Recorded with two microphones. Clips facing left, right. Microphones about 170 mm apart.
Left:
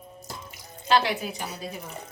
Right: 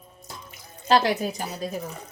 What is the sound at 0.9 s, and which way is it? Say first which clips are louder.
Speech: right 3 dB; 40° right (ahead or behind).